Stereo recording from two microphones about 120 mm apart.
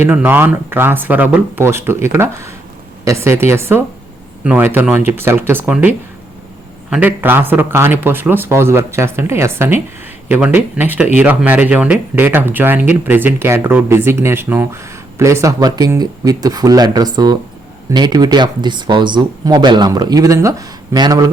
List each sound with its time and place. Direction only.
0.0 s speech: 15° right (ahead or behind)
6.9 s speech: 15° right (ahead or behind); by 21.2 s 35° right (ahead or behind)